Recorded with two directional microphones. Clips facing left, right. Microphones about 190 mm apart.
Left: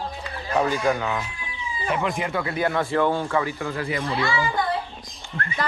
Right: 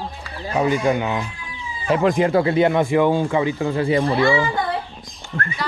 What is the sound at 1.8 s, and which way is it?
Speech, 35° right (ahead or behind).